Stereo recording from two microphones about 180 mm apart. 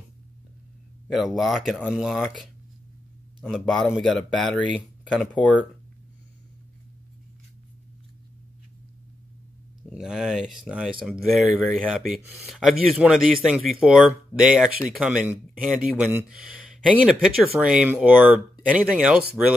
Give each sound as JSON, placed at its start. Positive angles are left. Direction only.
{"t": 1.0, "sound": "speech", "side_deg": 0}
{"t": 9.9, "sound": "speech", "side_deg": -5}